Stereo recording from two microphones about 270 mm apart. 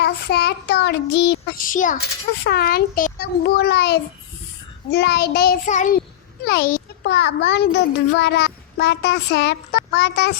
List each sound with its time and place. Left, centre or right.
0.0 s a child's voice: left